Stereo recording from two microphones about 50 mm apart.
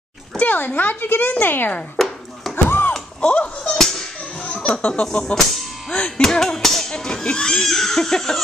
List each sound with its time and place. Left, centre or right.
0.4 s speech: left
2.0 s chopping: centre
2.5 s a sound: left
3.6 s music: centre
4.4 s music: left
5.0 s speech: centre
5.9 s speech: centre